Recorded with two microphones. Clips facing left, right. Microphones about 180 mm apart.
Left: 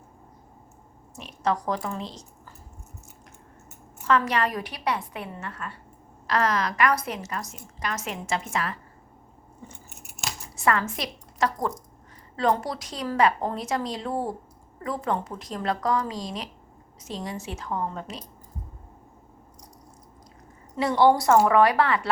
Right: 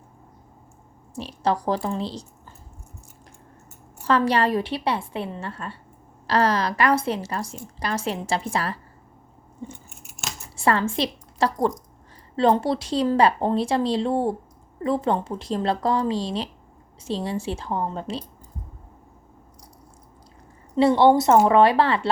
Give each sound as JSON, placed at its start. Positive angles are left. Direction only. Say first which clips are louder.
{"t": 1.1, "sound": "a woman's voice", "louder": "right 3 dB", "side_deg": -30}
{"t": 4.0, "sound": "a woman's voice", "louder": "right 3 dB", "side_deg": -30}
{"t": 9.6, "sound": "scissors", "louder": "right 9 dB", "side_deg": -25}
{"t": 10.5, "sound": "a woman's voice", "louder": "right 3 dB", "side_deg": -30}
{"t": 20.7, "sound": "a woman's voice", "louder": "right 4 dB", "side_deg": -25}